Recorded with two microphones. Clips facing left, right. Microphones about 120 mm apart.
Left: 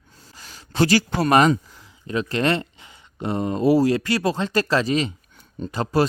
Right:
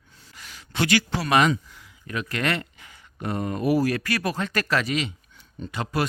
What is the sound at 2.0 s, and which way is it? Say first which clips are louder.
Speech: left 5 dB; 30° left (ahead or behind).